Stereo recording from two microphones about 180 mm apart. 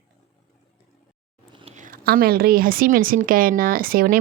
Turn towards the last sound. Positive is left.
turn(degrees=-55)  # may be behind; listen again after turning